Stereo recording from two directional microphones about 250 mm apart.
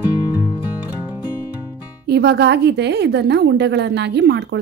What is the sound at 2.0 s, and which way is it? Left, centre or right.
A woman's voice, right.